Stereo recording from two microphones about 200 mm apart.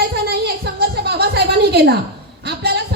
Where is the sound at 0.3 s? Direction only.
55° right (ahead or behind).